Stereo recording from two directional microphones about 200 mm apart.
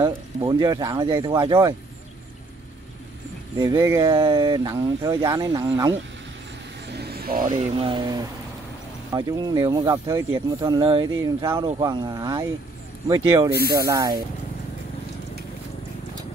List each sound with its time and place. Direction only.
0.0 s speech: 20° right (ahead or behind)
3.5 s speech: 15° right (ahead or behind)
6.9 s speech: 55° right (ahead or behind)
7.5 s speech: 30° right (ahead or behind)
13.5 s speech: 50° right (ahead or behind)
13.8 s speech: 20° right (ahead or behind)